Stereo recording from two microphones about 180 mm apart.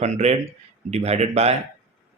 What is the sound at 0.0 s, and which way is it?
Speech, 40° right (ahead or behind).